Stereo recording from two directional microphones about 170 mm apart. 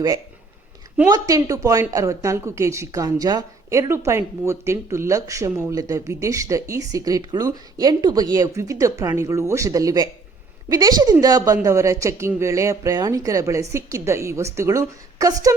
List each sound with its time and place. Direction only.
1.1 s a woman's voice: 20° right (ahead or behind)